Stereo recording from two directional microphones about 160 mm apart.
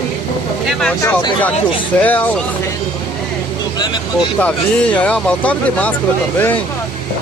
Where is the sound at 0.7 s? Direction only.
5° left (ahead or behind).